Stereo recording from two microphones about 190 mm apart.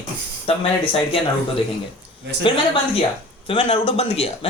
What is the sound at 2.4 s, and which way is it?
Speech, 25° left (ahead or behind).